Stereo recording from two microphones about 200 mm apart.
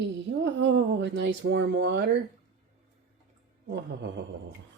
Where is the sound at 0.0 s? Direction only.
60° right (ahead or behind).